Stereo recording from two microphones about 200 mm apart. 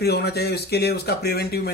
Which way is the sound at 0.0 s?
55° left (ahead or behind).